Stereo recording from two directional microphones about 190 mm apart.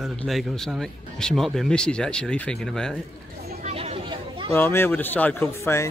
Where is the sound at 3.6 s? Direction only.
30° right (ahead or behind).